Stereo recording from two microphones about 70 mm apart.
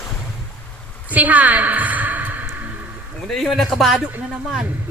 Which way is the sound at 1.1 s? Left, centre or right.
Right.